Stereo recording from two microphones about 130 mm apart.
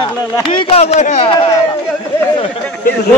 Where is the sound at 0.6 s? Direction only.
50° left (ahead or behind).